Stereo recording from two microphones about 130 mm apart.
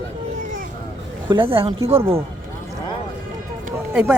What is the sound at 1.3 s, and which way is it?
Speech, 45° right (ahead or behind).